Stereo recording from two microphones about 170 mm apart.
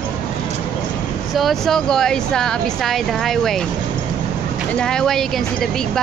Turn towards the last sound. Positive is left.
turn(degrees=5)  # may be behind; listen again after turning